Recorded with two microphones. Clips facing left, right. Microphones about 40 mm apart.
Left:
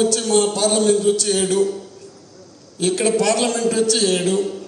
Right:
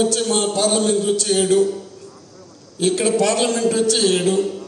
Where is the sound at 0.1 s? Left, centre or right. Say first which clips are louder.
Left 2 dB; right.